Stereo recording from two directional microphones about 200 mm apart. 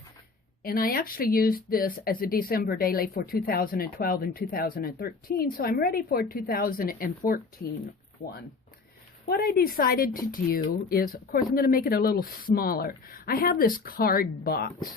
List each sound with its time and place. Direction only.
0.6 s speech: 45° left (ahead or behind)